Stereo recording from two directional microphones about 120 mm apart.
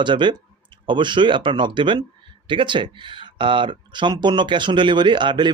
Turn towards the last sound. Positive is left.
turn(degrees=-40)  # may be behind; listen again after turning